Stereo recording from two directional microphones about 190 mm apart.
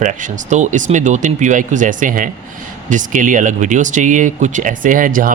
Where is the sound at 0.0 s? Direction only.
40° right (ahead or behind).